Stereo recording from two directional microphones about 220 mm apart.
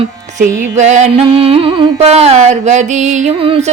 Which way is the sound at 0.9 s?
30° right (ahead or behind).